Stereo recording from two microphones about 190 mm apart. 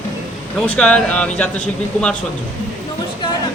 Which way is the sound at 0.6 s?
5° left (ahead or behind).